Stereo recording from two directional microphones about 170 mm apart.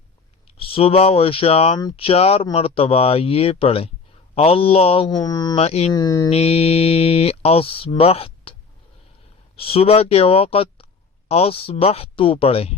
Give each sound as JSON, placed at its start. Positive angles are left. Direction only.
{"t": 0.4, "sound": "speech", "side_deg": 35}
{"t": 5.2, "sound": "mantra", "side_deg": 25}
{"t": 5.5, "sound": "speech", "side_deg": 35}
{"t": 5.9, "sound": "mantra", "side_deg": 20}
{"t": 6.3, "sound": "speech", "side_deg": 35}
{"t": 9.6, "sound": "speech", "side_deg": 35}